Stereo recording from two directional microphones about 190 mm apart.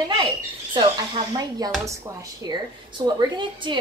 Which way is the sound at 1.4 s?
20° right (ahead or behind).